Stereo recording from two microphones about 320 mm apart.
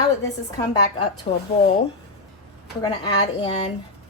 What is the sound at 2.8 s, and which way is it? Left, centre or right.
Speech, centre.